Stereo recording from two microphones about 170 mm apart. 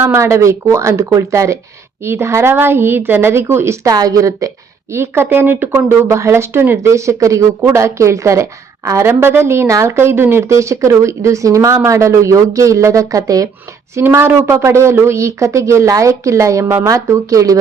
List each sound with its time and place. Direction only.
0.0 s a woman's voice: 15° right (ahead or behind)